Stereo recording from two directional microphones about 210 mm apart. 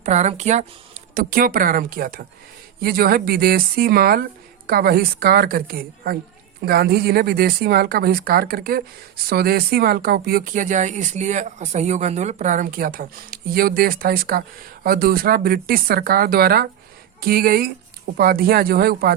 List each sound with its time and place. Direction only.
0.0 s speech: 30° right (ahead or behind)